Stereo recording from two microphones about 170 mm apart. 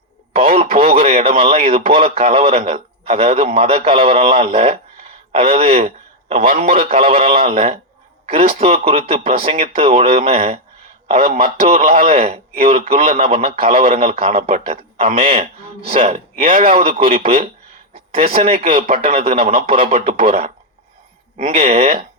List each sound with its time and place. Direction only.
0.3 s a man's voice: 35° right (ahead or behind)
21.3 s a man's voice: 40° right (ahead or behind)